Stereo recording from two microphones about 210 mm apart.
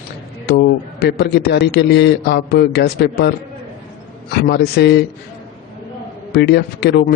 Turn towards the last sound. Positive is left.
turn(degrees=50)  # may be behind; listen again after turning